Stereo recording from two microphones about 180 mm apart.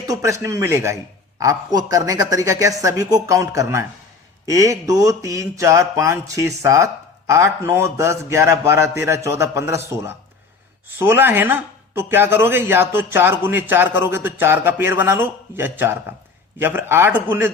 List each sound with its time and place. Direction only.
0.1 s speech: 15° right (ahead or behind)